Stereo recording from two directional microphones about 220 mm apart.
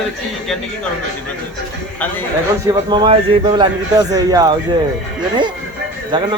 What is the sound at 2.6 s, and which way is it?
A man's voice, 20° right (ahead or behind).